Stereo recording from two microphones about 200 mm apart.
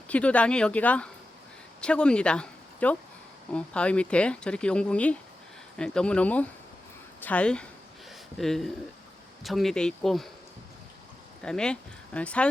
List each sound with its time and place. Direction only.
0.1 s speech: 5° left (ahead or behind)
11.4 s speech: 5° left (ahead or behind)